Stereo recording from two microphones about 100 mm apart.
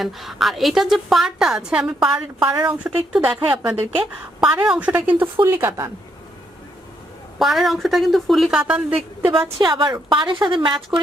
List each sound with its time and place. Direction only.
0.0 s a woman's voice: centre (ahead or behind)
2.4 s a woman's voice: 40° right (ahead or behind)
2.6 s a woman's voice: 10° right (ahead or behind)
7.3 s a woman's voice: centre (ahead or behind)
9.3 s a woman's voice: 50° right (ahead or behind)